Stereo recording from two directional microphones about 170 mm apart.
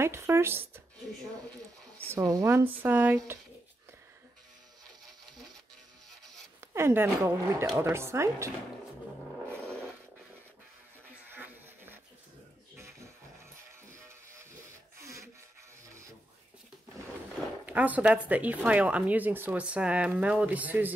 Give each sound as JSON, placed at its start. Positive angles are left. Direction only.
{"t": 0.0, "sound": "speech", "side_deg": -15}
{"t": 2.0, "sound": "speech", "side_deg": -20}
{"t": 6.6, "sound": "speech", "side_deg": -15}
{"t": 9.6, "sound": "a sound", "side_deg": 5}
{"t": 11.2, "sound": "a sound", "side_deg": -10}
{"t": 12.7, "sound": "music", "side_deg": -15}
{"t": 15.0, "sound": "rub", "side_deg": -15}
{"t": 17.6, "sound": "speech", "side_deg": -10}